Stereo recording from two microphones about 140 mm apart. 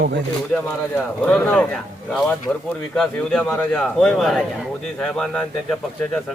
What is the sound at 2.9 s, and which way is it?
Speech, 5° left (ahead or behind).